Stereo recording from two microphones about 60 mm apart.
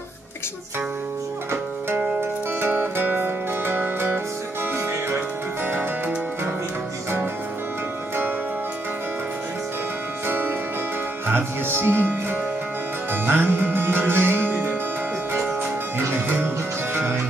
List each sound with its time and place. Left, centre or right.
2.6 s music: right
5.7 s music: right
10.2 s music: right
16.1 s music: right